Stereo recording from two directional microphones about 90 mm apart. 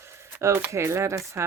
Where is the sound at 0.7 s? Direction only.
30° right (ahead or behind).